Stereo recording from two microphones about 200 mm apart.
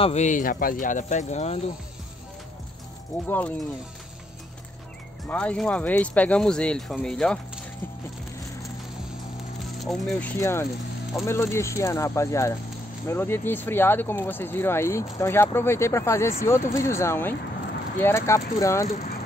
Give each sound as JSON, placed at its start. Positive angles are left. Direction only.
{"t": 0.0, "sound": "speech", "side_deg": 35}
{"t": 3.3, "sound": "speech", "side_deg": 5}
{"t": 5.2, "sound": "speech", "side_deg": 5}
{"t": 9.8, "sound": "speech", "side_deg": 0}